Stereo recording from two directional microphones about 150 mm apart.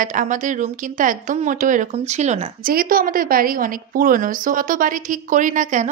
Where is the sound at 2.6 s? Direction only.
70° right (ahead or behind).